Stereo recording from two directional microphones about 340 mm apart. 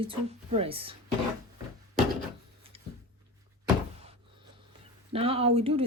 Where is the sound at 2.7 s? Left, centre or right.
Centre.